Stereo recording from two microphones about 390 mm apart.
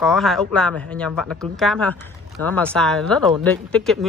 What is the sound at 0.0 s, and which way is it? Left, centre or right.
A woman's voice, centre.